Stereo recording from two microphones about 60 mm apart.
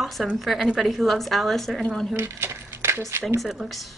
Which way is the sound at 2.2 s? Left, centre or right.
Right.